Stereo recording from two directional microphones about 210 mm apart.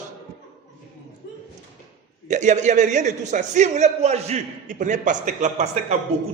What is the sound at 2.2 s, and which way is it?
A man's voice, 35° right (ahead or behind).